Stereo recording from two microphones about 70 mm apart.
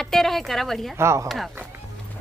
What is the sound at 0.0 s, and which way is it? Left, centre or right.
Speech, centre.